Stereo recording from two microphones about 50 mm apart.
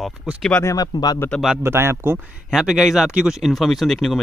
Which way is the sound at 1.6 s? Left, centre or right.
Right.